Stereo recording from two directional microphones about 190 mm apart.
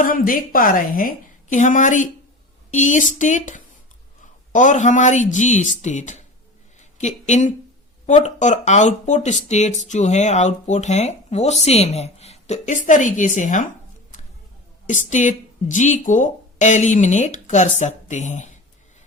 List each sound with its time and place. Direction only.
0.0 s a woman's voice: 45° left (ahead or behind)
14.8 s speech: 40° left (ahead or behind)